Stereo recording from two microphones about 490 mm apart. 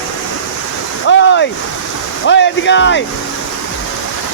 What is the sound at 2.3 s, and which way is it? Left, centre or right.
Speech, left.